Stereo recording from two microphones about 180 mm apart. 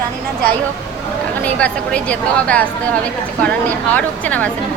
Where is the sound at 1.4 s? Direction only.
5° left (ahead or behind).